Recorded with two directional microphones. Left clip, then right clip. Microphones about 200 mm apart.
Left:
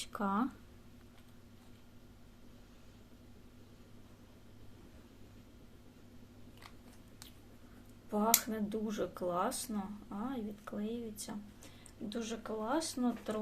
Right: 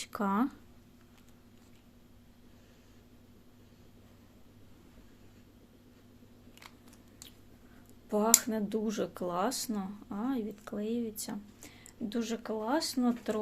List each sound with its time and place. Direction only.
0.0 s speech: 30° right (ahead or behind)
8.1 s speech: 55° right (ahead or behind)